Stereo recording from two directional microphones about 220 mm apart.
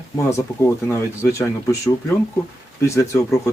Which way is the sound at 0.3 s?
10° left (ahead or behind).